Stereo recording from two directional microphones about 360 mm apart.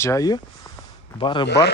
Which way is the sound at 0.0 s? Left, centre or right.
Centre.